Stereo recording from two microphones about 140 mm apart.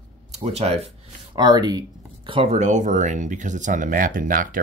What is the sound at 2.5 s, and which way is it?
Speech, 60° right (ahead or behind).